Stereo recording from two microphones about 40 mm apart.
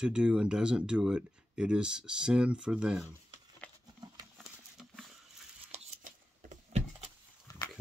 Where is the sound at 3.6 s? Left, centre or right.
Left.